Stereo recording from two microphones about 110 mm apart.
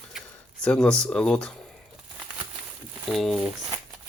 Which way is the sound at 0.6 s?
10° left (ahead or behind).